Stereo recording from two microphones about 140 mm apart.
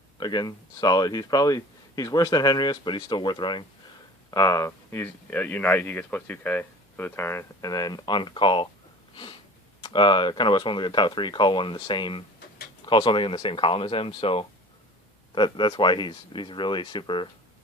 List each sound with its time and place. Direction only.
0.2 s speech: 30° left (ahead or behind)
9.8 s speech: 35° left (ahead or behind)